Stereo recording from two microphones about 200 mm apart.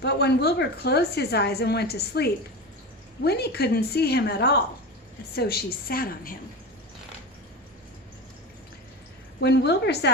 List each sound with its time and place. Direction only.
0.0 s a woman's voice: 55° left (ahead or behind)
9.4 s a woman's voice: 60° left (ahead or behind)